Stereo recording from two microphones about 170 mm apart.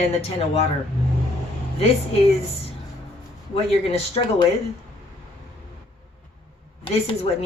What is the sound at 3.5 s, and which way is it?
Speech, 35° left (ahead or behind).